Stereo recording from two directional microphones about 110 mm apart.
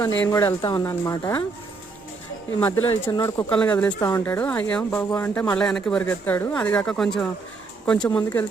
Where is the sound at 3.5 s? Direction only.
15° left (ahead or behind).